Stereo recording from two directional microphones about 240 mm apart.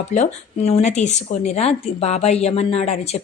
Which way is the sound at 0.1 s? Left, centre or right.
Left.